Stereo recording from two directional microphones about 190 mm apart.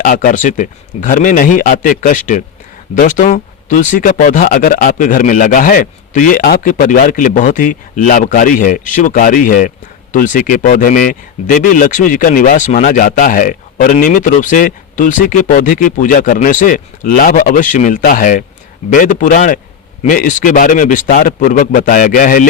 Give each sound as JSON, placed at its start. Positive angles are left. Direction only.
{"t": 0.0, "sound": "speech", "side_deg": 45}